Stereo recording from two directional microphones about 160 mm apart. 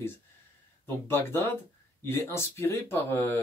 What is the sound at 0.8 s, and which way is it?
Speech, 15° left (ahead or behind).